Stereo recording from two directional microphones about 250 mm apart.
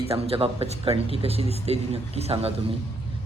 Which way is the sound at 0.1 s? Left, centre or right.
Right.